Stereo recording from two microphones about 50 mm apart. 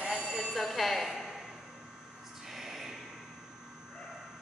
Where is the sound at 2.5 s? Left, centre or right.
Centre.